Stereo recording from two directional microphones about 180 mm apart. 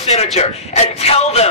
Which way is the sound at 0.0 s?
35° left (ahead or behind).